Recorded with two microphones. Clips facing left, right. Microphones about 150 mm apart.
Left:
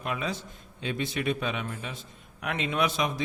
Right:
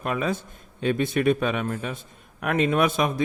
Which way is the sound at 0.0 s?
50° right (ahead or behind).